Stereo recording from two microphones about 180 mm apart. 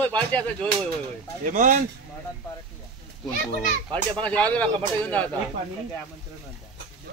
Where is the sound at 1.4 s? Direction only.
45° right (ahead or behind).